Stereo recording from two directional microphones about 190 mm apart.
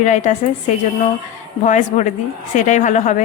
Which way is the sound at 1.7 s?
40° left (ahead or behind).